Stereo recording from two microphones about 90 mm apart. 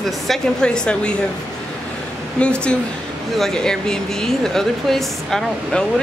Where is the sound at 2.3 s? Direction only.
10° left (ahead or behind).